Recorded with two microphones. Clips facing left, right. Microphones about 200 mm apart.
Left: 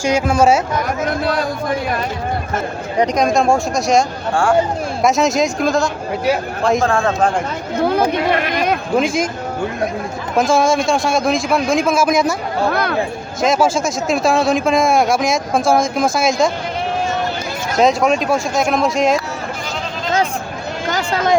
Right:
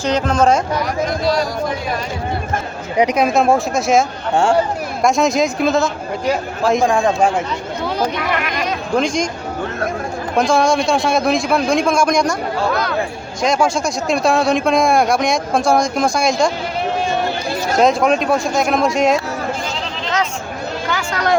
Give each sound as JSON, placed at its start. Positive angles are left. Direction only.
{"t": 0.0, "sound": "speech", "side_deg": 10}
{"t": 1.2, "sound": "a man's voice", "side_deg": 55}
{"t": 3.0, "sound": "speech", "side_deg": -10}
{"t": 5.0, "sound": "speech", "side_deg": 0}
{"t": 6.8, "sound": "a man's voice", "side_deg": -15}
{"t": 8.2, "sound": "speech", "side_deg": 30}
{"t": 9.0, "sound": "speech", "side_deg": 5}
{"t": 10.3, "sound": "speech", "side_deg": 0}
{"t": 12.7, "sound": "a man's voice", "side_deg": 55}
{"t": 13.4, "sound": "speech", "side_deg": 0}
{"t": 17.7, "sound": "speech", "side_deg": 0}